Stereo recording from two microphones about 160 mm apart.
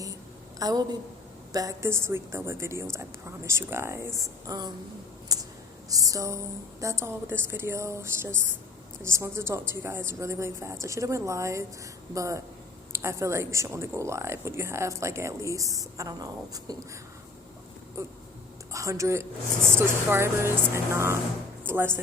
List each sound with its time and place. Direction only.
0.6 s a woman's voice: 25° right (ahead or behind)
5.3 s a sound: 25° right (ahead or behind)
5.9 s a woman's voice: 20° right (ahead or behind)
18.0 s a woman's voice: 20° right (ahead or behind)